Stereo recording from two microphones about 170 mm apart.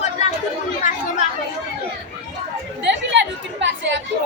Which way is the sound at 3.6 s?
90° right.